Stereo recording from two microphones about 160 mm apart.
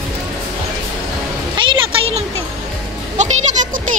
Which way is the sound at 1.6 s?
30° right (ahead or behind).